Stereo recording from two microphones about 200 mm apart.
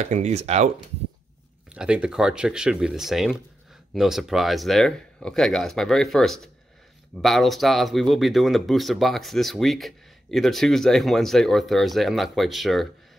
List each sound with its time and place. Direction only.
0.0 s speech: 35° right (ahead or behind)
1.7 s speech: 5° right (ahead or behind)